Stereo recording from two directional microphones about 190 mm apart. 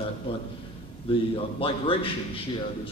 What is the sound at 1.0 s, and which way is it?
A man's voice, 30° left (ahead or behind).